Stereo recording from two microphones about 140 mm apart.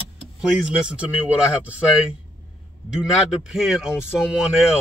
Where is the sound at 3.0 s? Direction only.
5° right (ahead or behind).